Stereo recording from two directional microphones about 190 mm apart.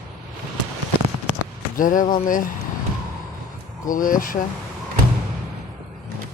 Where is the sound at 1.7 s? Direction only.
45° left (ahead or behind).